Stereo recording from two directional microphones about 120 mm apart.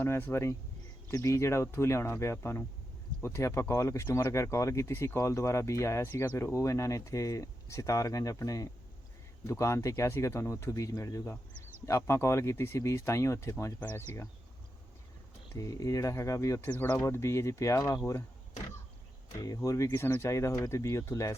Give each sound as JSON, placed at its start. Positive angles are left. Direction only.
{"t": 0.0, "sound": "speech", "side_deg": 20}
{"t": 15.5, "sound": "speech", "side_deg": 30}
{"t": 16.6, "sound": "speech", "side_deg": 10}
{"t": 17.0, "sound": "speech", "side_deg": 25}
{"t": 19.4, "sound": "speech", "side_deg": 30}